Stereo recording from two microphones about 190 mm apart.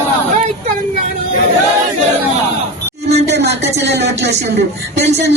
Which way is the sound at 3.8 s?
65° right (ahead or behind).